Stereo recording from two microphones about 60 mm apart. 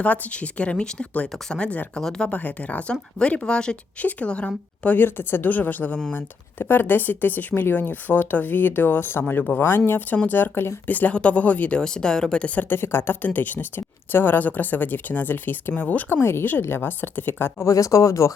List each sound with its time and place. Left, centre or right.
0.0 s speech: left; by 2.3 s centre
2.3 s speech: left
4.9 s speech: left
11.8 s speech: centre
12.5 s speech: left
16.2 s speech: left
17.7 s speech: left